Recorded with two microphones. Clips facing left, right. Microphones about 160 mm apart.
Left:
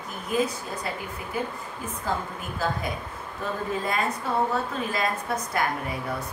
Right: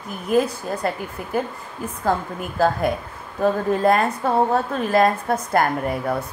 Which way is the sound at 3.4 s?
55° right (ahead or behind).